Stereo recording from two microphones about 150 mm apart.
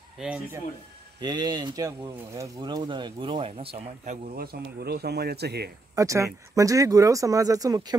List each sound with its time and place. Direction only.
0.2 s speech: 10° right (ahead or behind)
1.2 s speech: 30° right (ahead or behind); by 4.2 s 45° right (ahead or behind)
4.4 s speech: 90° right
5.9 s speech: 20° right (ahead or behind)